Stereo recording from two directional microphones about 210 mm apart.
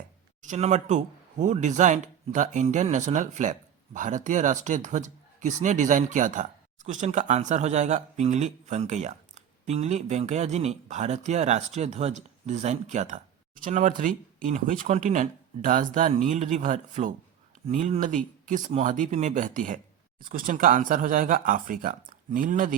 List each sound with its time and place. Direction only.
0.4 s speech: 35° right (ahead or behind)